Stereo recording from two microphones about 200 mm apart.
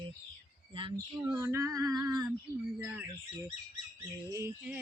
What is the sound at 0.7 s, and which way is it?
Speech, 25° right (ahead or behind).